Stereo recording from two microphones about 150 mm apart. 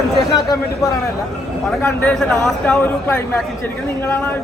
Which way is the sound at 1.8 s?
15° left (ahead or behind).